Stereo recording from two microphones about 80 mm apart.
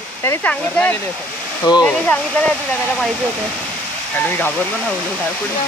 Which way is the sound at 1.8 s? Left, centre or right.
Centre.